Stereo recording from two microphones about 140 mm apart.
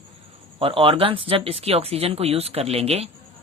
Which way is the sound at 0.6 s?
40° right (ahead or behind).